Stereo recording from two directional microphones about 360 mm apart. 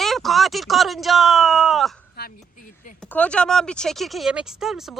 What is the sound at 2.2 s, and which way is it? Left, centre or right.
Speech, left.